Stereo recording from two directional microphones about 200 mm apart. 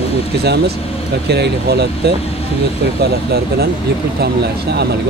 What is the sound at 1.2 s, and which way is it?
Speech, 55° right (ahead or behind).